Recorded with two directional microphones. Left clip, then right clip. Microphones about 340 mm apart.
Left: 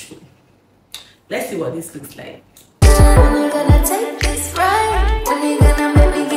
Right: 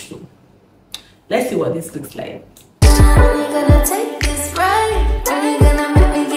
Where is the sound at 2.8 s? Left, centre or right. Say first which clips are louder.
Left 1 dB; centre.